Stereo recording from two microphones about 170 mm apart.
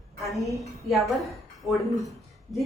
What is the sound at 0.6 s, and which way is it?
A woman's voice, centre (ahead or behind).